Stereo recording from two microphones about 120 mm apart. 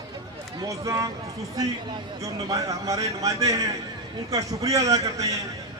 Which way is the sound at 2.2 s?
25° right (ahead or behind).